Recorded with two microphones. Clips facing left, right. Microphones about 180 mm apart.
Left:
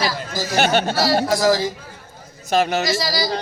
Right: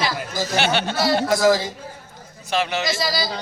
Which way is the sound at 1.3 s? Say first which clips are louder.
Even; 20° right (ahead or behind).